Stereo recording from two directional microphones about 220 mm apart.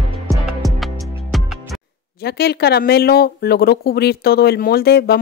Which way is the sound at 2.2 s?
45° left (ahead or behind).